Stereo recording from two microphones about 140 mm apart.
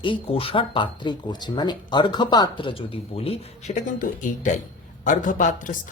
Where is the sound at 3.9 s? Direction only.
75° left (ahead or behind).